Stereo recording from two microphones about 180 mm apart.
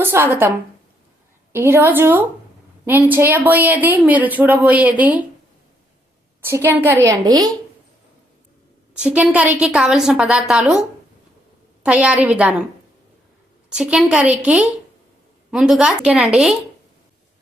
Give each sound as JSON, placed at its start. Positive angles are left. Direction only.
{"t": 0.0, "sound": "a woman's voice", "side_deg": -10}
{"t": 1.5, "sound": "a woman's voice", "side_deg": -15}
{"t": 6.4, "sound": "a woman's voice", "side_deg": -15}
{"t": 9.0, "sound": "a woman's voice", "side_deg": -5}
{"t": 13.7, "sound": "a woman's voice", "side_deg": -5}